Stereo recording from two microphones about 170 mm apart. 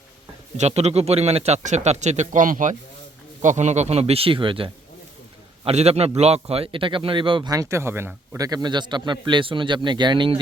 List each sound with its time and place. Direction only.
0.5 s a man's voice: 40° right (ahead or behind)